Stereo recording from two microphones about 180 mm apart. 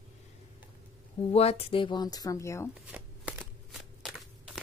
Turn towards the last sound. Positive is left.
turn(degrees=-5)  # may be behind; listen again after turning